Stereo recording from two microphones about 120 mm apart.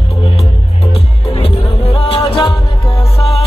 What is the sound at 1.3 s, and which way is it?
Music, 55° left (ahead or behind).